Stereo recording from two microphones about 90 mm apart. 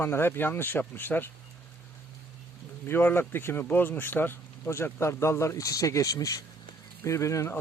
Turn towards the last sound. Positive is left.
turn(degrees=35)  # may be behind; listen again after turning